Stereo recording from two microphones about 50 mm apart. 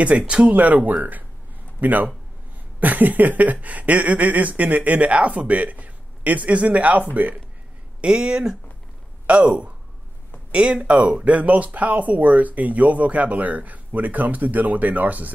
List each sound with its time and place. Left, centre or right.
0.1 s speech: right
8.0 s speech: centre
9.2 s speech: right